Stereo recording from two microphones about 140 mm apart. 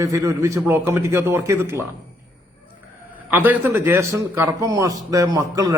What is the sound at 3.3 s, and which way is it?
A man's voice, 15° right (ahead or behind).